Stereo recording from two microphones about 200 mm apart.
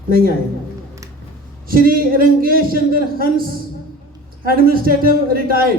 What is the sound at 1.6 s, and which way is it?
A man's voice, 45° right (ahead or behind).